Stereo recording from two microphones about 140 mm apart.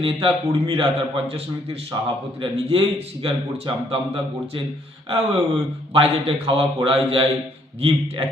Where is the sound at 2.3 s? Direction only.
45° right (ahead or behind).